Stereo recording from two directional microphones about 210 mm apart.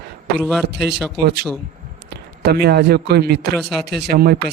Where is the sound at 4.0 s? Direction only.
50° right (ahead or behind).